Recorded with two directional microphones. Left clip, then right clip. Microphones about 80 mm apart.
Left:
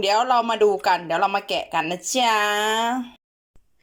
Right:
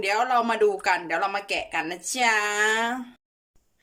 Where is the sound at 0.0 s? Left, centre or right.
Left.